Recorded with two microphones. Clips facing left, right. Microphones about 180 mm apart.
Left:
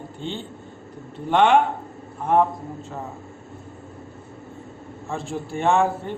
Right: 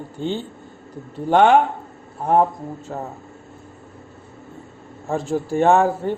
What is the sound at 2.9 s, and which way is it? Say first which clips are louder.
Speech: right 5 dB; 50° right (ahead or behind).